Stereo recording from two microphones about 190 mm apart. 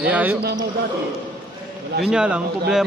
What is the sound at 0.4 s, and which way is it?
Speech, 55° right (ahead or behind).